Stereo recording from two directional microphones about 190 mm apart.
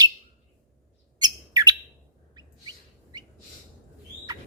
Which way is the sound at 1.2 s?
20° right (ahead or behind).